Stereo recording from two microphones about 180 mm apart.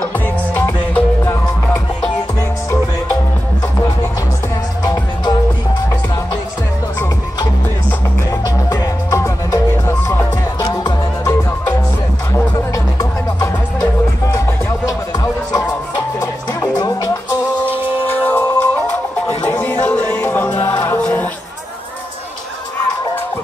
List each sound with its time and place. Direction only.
1.2 s music: 15° left (ahead or behind)
4.8 s music: 20° left (ahead or behind)
8.3 s music: 20° left (ahead or behind)
14.3 s music: 20° left (ahead or behind)
18.0 s music: 10° left (ahead or behind)